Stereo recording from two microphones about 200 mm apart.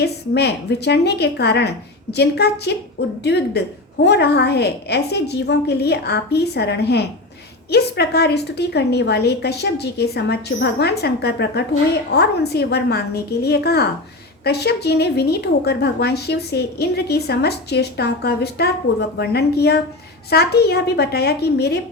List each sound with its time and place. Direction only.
0.0 s a woman's voice: 55° left (ahead or behind)